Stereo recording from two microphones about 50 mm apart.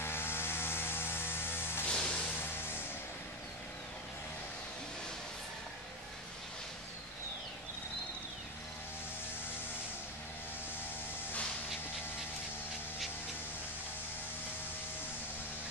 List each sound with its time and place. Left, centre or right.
0.0 s vehicle: left
1.9 s music: left